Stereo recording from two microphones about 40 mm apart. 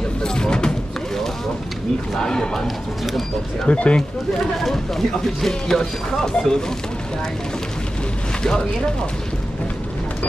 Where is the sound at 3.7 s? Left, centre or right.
Left.